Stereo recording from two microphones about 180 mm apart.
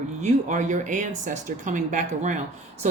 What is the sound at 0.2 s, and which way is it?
Speech, 40° right (ahead or behind).